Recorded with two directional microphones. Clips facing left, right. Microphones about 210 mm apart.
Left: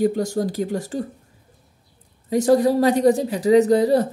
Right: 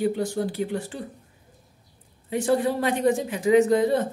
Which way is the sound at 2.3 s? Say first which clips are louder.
Left 6 dB; 40° left (ahead or behind).